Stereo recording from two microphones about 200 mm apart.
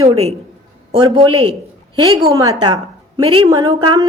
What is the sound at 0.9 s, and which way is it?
A man's voice, 25° right (ahead or behind).